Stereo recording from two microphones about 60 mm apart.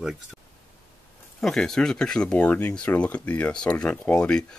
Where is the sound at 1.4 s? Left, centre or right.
Centre.